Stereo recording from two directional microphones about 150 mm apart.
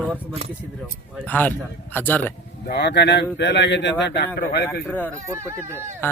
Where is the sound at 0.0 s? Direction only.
10° right (ahead or behind).